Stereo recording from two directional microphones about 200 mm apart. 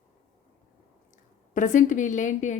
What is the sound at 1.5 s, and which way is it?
A woman's voice, 40° left (ahead or behind).